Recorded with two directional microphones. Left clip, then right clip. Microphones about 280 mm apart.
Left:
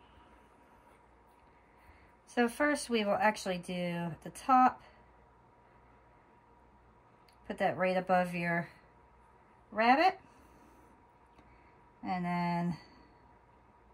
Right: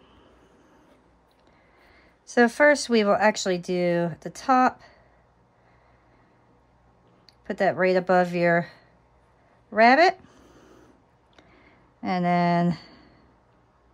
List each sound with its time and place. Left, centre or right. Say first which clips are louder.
2.2 s speech: right 13 dB; centre
7.2 s speech: right 9 dB; centre
9.8 s speech: right 10 dB; right
12.0 s speech: right 12 dB; centre